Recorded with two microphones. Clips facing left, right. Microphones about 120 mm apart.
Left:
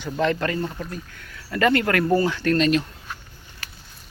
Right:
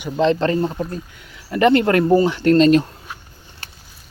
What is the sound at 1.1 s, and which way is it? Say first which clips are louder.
Speech: right 4 dB; 15° right (ahead or behind).